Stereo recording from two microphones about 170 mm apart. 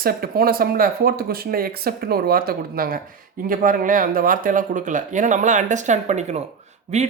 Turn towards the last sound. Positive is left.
turn(degrees=-40)  # may be behind; listen again after turning